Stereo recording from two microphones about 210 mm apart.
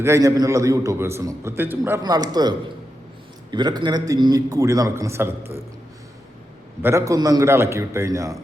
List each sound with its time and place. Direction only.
0.0 s a man's voice: 15° right (ahead or behind)
6.8 s a man's voice: 15° right (ahead or behind)